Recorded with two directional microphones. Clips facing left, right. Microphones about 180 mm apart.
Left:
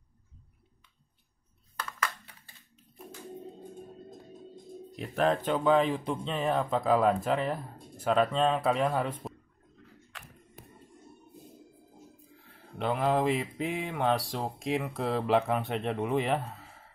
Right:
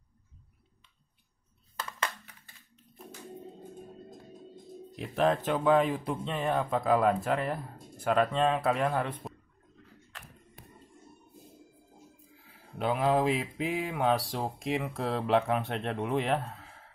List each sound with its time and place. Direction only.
1.8 s crushing: 25° right (ahead or behind)
3.2 s music: centre (ahead or behind)
12.3 s speech: centre (ahead or behind)